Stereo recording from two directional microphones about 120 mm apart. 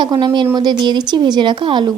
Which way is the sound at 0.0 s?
35° right (ahead or behind).